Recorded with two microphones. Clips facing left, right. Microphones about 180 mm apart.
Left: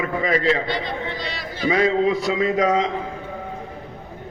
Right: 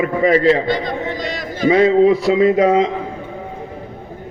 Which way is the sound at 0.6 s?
45° right (ahead or behind).